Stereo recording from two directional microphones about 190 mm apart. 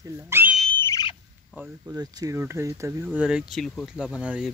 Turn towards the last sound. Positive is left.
turn(degrees=-5)  # may be behind; listen again after turning